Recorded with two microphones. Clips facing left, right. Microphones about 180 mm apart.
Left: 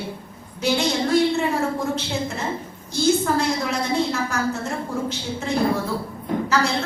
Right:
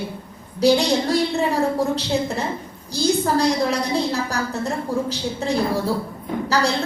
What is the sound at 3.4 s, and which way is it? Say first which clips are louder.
A woman's voice: right 4 dB; 35° right (ahead or behind).